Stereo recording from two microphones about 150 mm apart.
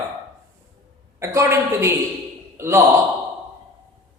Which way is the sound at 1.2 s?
20° right (ahead or behind).